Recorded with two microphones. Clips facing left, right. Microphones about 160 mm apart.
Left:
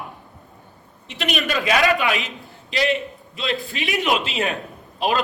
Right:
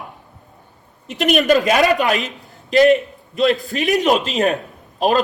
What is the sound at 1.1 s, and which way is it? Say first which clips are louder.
A woman's voice: right 10 dB; 45° right (ahead or behind).